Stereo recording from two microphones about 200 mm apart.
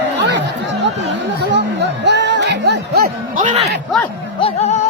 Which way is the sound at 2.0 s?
60° right (ahead or behind).